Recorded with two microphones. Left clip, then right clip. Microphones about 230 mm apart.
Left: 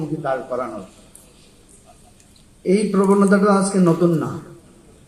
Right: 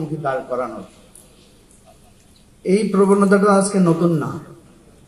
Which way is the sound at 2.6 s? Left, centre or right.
Right.